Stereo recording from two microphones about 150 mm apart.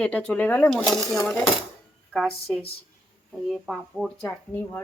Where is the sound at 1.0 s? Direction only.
25° left (ahead or behind).